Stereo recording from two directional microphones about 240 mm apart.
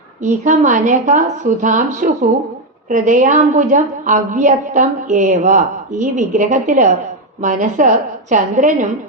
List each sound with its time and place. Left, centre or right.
0.2 s a woman's voice: right